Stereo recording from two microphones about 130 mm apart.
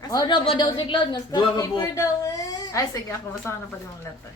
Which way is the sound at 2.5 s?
25° left (ahead or behind).